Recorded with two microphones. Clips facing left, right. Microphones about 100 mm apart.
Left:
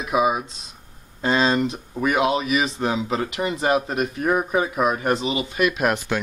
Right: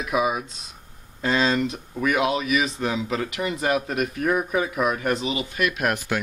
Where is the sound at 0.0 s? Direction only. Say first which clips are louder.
Left 3 dB; 30° left (ahead or behind).